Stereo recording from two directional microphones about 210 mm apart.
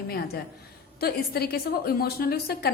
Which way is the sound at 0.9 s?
45° left (ahead or behind).